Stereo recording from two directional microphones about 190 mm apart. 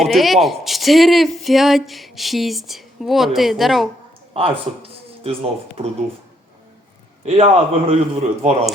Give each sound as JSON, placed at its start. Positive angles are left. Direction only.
{"t": 0.0, "sound": "speech", "side_deg": 0}
{"t": 4.4, "sound": "speech", "side_deg": -30}
{"t": 7.3, "sound": "speech", "side_deg": -35}